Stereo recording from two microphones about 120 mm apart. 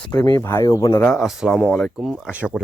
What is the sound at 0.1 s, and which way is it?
Speech, 30° left (ahead or behind).